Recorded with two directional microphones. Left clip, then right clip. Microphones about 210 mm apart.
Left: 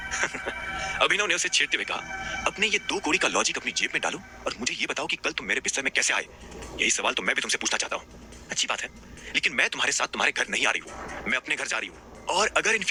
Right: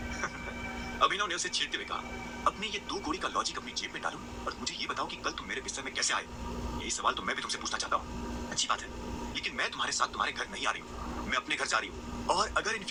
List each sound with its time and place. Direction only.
0.9 s speech: 20° left (ahead or behind)